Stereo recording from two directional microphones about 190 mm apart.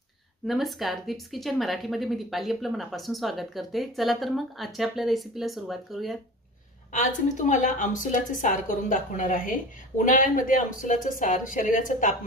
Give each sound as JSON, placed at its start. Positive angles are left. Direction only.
{"t": 0.5, "sound": "a woman's voice", "side_deg": 0}
{"t": 6.9, "sound": "a woman's voice", "side_deg": 40}